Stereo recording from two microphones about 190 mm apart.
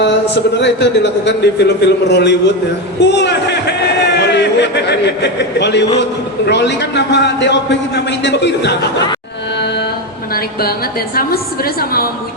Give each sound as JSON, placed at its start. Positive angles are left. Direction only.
{"t": 0.6, "sound": "a man's voice", "side_deg": 65}
{"t": 10.3, "sound": "a woman's voice", "side_deg": 50}